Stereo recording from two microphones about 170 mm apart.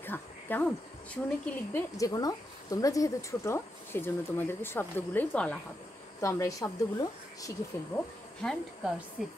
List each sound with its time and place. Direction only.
0.0 s speech: 10° left (ahead or behind)
2.0 s speech: 20° left (ahead or behind)
6.2 s speech: 20° left (ahead or behind)
8.4 s speech: 5° left (ahead or behind)